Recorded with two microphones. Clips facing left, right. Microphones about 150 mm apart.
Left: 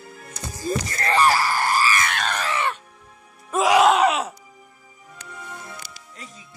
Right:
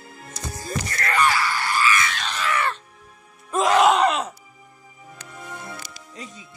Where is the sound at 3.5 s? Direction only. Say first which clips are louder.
Left 1 dB; 5° left (ahead or behind).